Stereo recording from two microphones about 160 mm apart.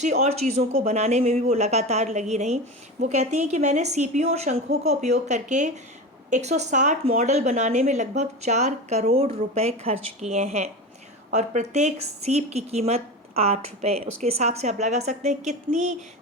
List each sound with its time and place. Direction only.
0.0 s speech: 45° right (ahead or behind)